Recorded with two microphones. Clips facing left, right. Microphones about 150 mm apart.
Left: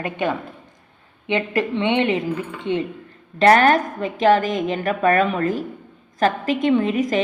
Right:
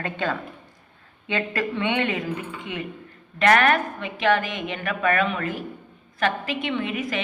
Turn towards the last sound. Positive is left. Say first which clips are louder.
# left 9 dB
turn(degrees=40)  # may be behind; listen again after turning